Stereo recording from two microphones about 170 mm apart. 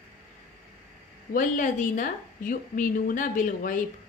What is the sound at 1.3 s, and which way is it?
Speech, 50° left (ahead or behind).